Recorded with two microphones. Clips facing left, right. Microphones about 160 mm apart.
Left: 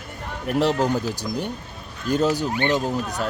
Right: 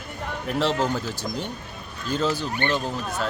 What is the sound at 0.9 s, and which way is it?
Speech, 15° left (ahead or behind).